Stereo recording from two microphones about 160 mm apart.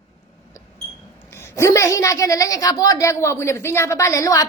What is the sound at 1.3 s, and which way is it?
A woman's voice, 15° left (ahead or behind).